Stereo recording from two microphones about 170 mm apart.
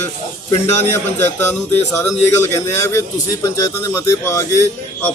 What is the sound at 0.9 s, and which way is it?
A man's voice, 15° left (ahead or behind).